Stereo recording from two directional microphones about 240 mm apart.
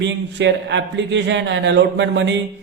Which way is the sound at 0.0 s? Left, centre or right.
Right.